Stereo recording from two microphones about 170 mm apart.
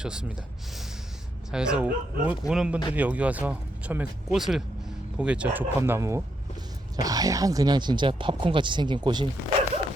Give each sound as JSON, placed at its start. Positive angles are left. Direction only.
{"t": 0.0, "sound": "speech", "side_deg": -5}